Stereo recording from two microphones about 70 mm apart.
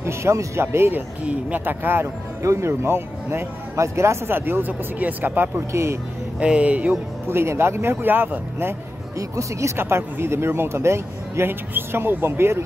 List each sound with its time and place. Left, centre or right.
0.0 s speech: right
1.2 s speech: centre
1.6 s speech: right
2.4 s speech: right
5.7 s speech: right
6.4 s speech: centre
7.2 s speech: right
9.3 s speech: right
9.8 s speech: right